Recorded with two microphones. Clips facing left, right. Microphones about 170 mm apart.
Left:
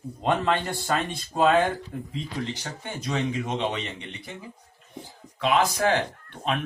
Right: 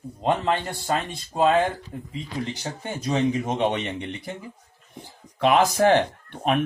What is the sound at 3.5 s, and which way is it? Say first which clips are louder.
Speech: right 4 dB; 55° right (ahead or behind).